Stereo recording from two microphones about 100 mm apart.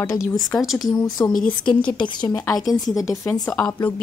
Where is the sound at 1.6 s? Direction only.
50° left (ahead or behind).